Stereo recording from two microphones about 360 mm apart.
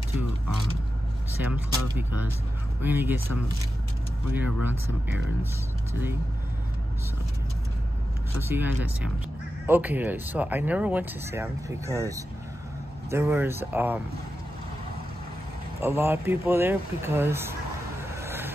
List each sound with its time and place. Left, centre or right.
1.4 s speech: centre
8.4 s speech: centre
15.8 s speech: centre
18.0 s vehicle: centre